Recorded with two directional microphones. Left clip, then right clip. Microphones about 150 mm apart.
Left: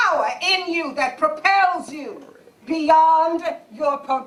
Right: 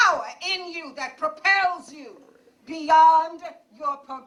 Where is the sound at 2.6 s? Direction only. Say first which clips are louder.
Left 1 dB; 45° right (ahead or behind).